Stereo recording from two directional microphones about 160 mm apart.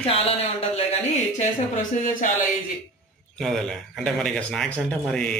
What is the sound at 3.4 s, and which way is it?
Speech, centre (ahead or behind).